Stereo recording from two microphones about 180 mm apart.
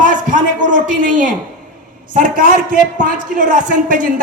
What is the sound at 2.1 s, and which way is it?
A man's voice, 50° right (ahead or behind).